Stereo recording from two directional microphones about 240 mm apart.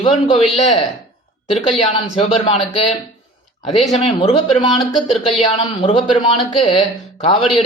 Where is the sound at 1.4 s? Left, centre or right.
Left.